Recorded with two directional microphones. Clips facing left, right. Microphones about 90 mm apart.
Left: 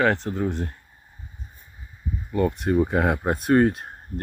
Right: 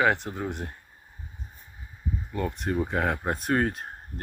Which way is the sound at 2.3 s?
5° left (ahead or behind).